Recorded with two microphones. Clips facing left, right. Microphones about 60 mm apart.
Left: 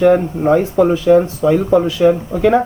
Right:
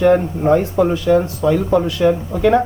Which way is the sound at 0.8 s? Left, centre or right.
Left.